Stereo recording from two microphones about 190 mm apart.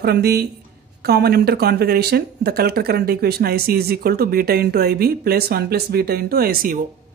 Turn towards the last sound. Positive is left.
turn(degrees=-50)  # may be behind; listen again after turning